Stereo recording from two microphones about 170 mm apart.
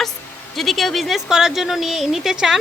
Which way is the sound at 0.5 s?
Centre (ahead or behind).